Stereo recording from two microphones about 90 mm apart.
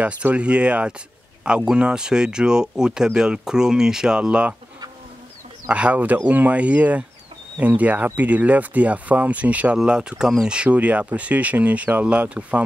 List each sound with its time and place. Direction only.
0.0 s speech: 15° right (ahead or behind)
5.7 s speech: 15° right (ahead or behind)